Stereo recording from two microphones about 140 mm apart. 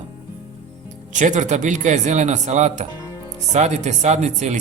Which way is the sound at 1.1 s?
60° right (ahead or behind).